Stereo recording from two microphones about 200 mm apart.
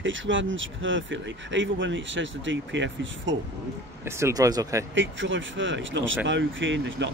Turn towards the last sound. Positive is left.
turn(degrees=-65)  # may be behind; listen again after turning